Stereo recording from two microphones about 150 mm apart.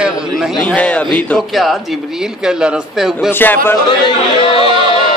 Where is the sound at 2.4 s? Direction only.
5° right (ahead or behind).